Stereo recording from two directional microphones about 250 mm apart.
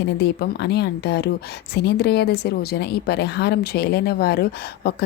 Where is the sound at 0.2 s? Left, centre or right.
Left.